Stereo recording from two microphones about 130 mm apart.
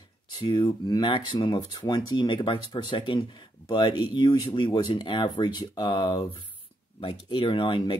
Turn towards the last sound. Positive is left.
turn(degrees=40)  # may be behind; listen again after turning